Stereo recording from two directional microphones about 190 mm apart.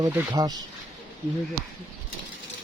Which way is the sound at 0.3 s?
20° right (ahead or behind).